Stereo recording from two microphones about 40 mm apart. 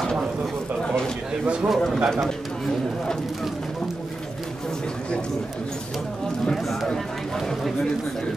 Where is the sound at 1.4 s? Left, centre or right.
Right.